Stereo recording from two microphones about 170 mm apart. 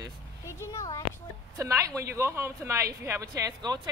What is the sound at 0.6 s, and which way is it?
Speech, 20° left (ahead or behind).